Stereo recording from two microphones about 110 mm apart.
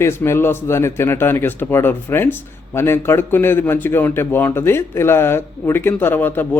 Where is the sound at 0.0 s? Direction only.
25° left (ahead or behind).